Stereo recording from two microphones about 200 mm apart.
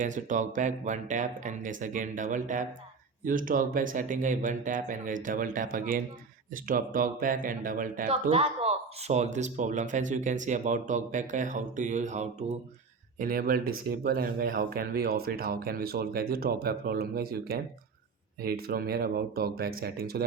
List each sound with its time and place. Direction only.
0.0 s speech: 40° right (ahead or behind)
8.1 s speech: 30° right (ahead or behind); by 20.2 s 50° right (ahead or behind)